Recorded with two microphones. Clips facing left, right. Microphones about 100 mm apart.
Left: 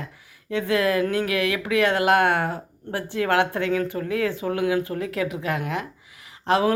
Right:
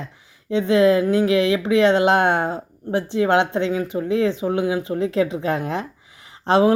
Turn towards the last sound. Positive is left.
turn(degrees=-30)  # may be behind; listen again after turning